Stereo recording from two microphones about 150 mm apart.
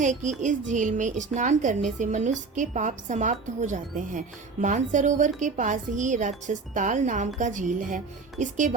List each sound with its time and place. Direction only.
0.0 s speech: 55° right (ahead or behind)